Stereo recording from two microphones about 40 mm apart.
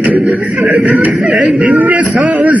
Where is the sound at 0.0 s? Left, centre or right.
Right.